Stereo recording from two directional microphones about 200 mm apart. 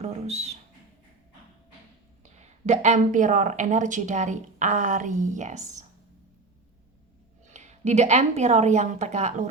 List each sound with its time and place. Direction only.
0.0 s speech: 35° right (ahead or behind)
2.2 s speech: 35° right (ahead or behind)
7.5 s speech: 35° right (ahead or behind)